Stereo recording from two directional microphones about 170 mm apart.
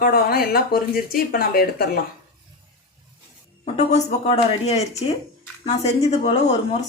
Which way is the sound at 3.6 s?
40° left (ahead or behind).